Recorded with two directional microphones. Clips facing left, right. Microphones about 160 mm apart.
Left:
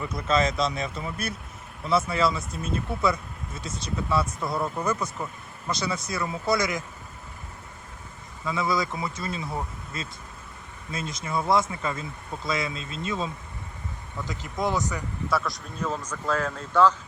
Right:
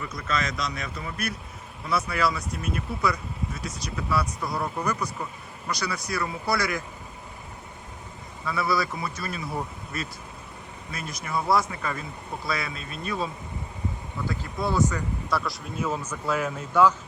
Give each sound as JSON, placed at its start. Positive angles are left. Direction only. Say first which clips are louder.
{"t": 0.1, "sound": "speech", "louder": "left 7 dB", "side_deg": 25}
{"t": 4.5, "sound": "speech", "louder": "left 1 dB", "side_deg": 0}
{"t": 4.9, "sound": "speech", "louder": "left 1 dB", "side_deg": 25}
{"t": 8.4, "sound": "speech", "louder": "even", "side_deg": 20}
{"t": 14.3, "sound": "speech", "louder": "even", "side_deg": 15}
{"t": 15.3, "sound": "speech", "louder": "left 2 dB", "side_deg": 0}